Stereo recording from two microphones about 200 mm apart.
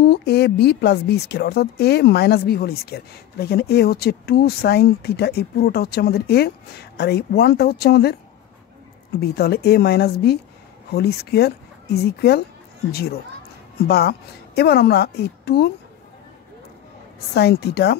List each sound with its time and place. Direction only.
0.0 s a woman's voice: 50° left (ahead or behind)
9.2 s a woman's voice: 55° left (ahead or behind)
17.3 s a woman's voice: 55° left (ahead or behind)